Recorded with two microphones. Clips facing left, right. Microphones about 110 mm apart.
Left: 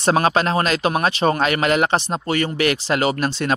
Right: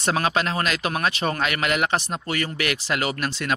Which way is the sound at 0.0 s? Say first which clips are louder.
Left 6 dB; 35° left (ahead or behind).